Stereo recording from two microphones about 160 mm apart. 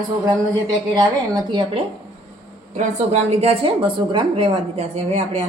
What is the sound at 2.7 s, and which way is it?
A woman's voice, 45° right (ahead or behind).